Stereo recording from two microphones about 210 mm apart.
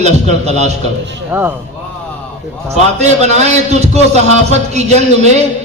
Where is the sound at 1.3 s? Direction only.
10° right (ahead or behind).